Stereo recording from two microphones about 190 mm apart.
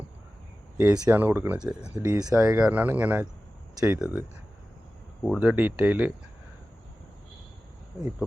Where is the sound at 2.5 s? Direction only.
5° right (ahead or behind).